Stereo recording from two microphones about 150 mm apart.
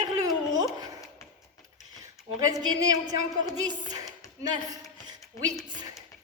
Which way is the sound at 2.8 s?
25° right (ahead or behind).